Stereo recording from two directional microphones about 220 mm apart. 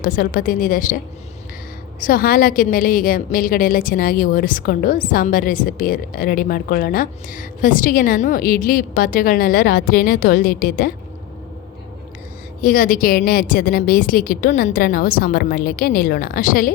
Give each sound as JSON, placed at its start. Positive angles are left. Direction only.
{"t": 0.0, "sound": "a woman's voice", "side_deg": 40}
{"t": 2.0, "sound": "a woman's voice", "side_deg": 40}
{"t": 12.6, "sound": "a woman's voice", "side_deg": 40}